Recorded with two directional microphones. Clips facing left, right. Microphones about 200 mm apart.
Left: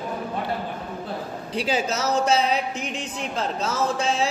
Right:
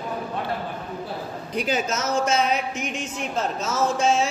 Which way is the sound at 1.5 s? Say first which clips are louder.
Even; 30° left (ahead or behind).